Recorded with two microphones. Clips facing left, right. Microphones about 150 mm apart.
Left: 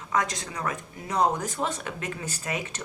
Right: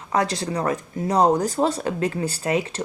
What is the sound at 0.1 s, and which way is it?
Speech, 35° right (ahead or behind).